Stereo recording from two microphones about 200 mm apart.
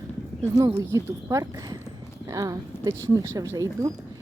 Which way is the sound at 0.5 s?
15° right (ahead or behind).